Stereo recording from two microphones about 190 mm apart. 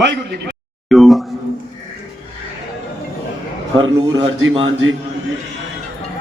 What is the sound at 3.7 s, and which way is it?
Speech, 25° right (ahead or behind).